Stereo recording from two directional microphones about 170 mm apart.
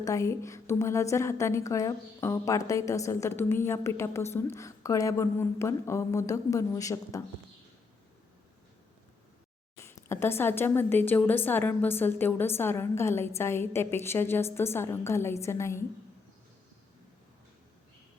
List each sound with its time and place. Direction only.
0.0 s a woman's voice: 20° left (ahead or behind)
9.7 s a woman's voice: 15° left (ahead or behind)